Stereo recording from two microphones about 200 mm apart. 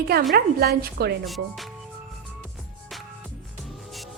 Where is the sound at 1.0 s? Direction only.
50° right (ahead or behind).